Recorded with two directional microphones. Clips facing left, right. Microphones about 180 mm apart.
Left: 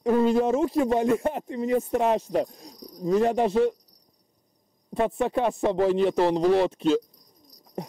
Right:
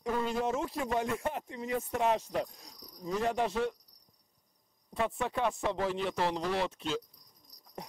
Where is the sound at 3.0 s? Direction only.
45° left (ahead or behind).